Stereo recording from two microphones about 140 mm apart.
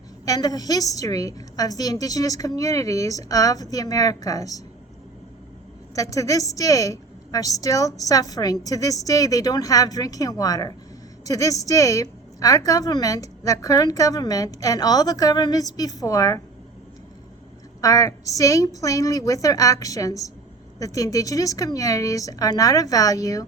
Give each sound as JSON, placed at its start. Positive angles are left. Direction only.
{"t": 0.3, "sound": "a woman's voice", "side_deg": 25}
{"t": 5.9, "sound": "a woman's voice", "side_deg": 25}
{"t": 17.7, "sound": "a woman's voice", "side_deg": 25}